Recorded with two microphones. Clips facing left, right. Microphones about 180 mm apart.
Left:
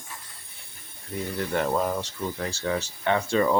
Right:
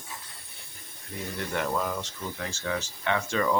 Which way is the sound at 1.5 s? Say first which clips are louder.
Left 4 dB; 35° left (ahead or behind).